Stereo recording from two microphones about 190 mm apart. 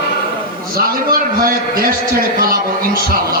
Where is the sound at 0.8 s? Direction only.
50° right (ahead or behind).